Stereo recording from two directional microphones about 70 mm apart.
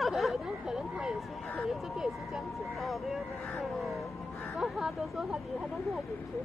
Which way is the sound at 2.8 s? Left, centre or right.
Centre.